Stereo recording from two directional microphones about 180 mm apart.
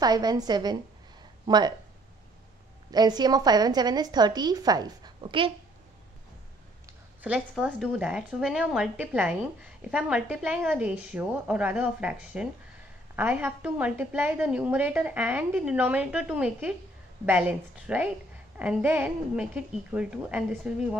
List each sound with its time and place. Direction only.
0.0 s a woman's voice: 20° right (ahead or behind)
2.9 s a woman's voice: 20° right (ahead or behind)
7.2 s a woman's voice: 5° right (ahead or behind)